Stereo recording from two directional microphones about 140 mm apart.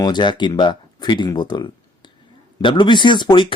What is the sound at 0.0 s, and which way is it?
A man's voice, 30° left (ahead or behind).